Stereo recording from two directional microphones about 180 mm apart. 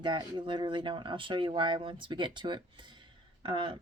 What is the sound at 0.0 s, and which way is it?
Speech, 25° right (ahead or behind).